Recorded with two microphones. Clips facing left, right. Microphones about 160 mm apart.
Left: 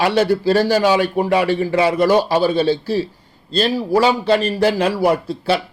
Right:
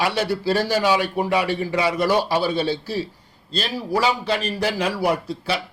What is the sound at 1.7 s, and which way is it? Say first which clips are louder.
Speech: left 5 dB; 45° left (ahead or behind).